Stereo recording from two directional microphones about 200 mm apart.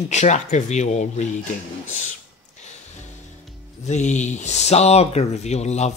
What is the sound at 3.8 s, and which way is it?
Speech, 35° left (ahead or behind).